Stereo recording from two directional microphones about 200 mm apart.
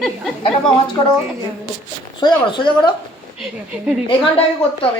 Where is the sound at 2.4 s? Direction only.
25° left (ahead or behind).